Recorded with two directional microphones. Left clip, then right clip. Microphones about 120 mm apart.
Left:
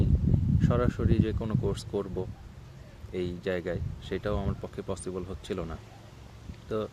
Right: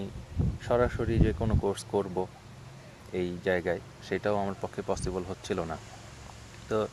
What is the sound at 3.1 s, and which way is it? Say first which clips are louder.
Speech: right 3 dB; 20° left (ahead or behind).